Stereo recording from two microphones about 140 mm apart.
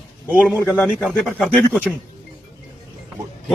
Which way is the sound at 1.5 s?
5° left (ahead or behind).